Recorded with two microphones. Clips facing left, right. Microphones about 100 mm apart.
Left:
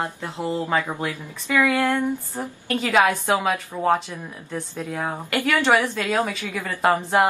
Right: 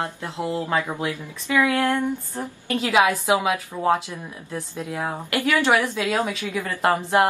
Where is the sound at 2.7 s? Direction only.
5° right (ahead or behind).